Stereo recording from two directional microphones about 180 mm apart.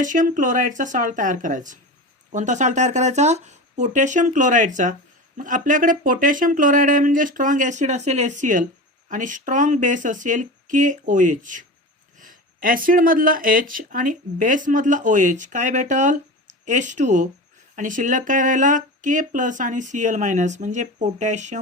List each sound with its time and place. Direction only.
0.0 s speech: 45° right (ahead or behind)